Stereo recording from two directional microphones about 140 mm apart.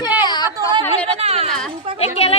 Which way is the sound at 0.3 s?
30° left (ahead or behind).